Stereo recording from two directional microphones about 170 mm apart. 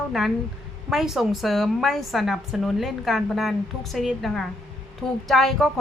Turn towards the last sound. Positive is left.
turn(degrees=0)  # may be behind; listen again after turning